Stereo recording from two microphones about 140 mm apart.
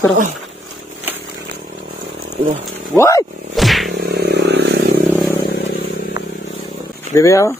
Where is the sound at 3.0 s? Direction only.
20° left (ahead or behind).